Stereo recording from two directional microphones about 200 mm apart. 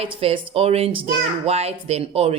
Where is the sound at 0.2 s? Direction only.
30° right (ahead or behind).